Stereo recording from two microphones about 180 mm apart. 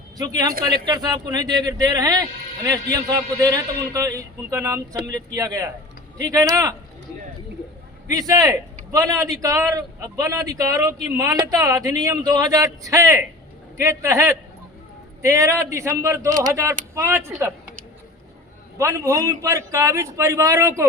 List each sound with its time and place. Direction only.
0.2 s a man's voice: 20° right (ahead or behind)
8.1 s a man's voice: 20° right (ahead or behind)
18.8 s speech: 15° right (ahead or behind)